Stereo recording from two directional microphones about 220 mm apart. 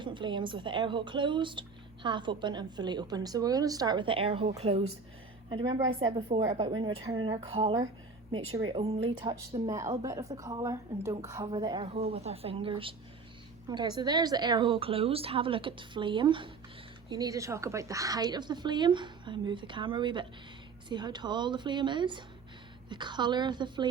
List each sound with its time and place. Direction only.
0.0 s speech: 20° right (ahead or behind)